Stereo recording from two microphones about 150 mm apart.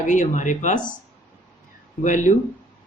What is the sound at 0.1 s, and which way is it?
Speech, 55° left (ahead or behind).